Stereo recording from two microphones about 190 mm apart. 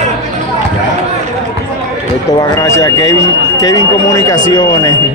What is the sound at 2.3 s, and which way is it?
Speech, 15° left (ahead or behind).